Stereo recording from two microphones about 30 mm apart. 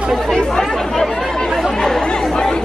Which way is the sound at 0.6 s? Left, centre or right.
Centre.